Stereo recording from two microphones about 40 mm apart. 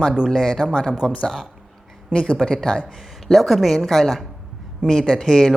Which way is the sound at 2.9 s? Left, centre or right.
Centre.